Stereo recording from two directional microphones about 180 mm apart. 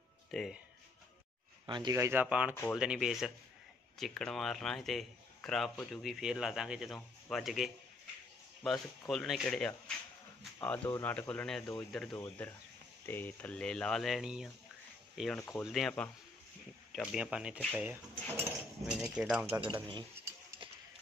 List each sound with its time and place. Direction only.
0.3 s speech: centre (ahead or behind)
1.7 s speech: 20° right (ahead or behind); by 14.5 s 5° right (ahead or behind)
15.3 s speech: 10° left (ahead or behind)
15.6 s speech: centre (ahead or behind)
19.6 s speech: 25° right (ahead or behind)